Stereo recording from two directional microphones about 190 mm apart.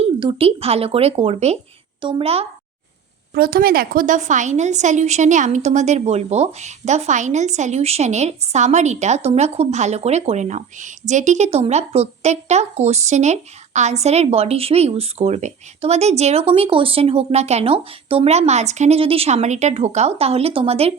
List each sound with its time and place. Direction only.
0.0 s a woman's voice: 30° right (ahead or behind)
3.3 s a woman's voice: 50° right (ahead or behind); by 20.9 s 30° right (ahead or behind)